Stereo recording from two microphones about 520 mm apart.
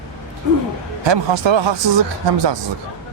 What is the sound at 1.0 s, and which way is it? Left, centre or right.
Speech, right.